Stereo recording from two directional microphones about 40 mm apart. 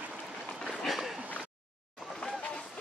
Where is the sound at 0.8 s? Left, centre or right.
Centre.